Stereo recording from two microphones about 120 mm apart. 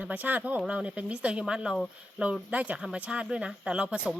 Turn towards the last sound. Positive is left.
turn(degrees=-10)  # may be behind; listen again after turning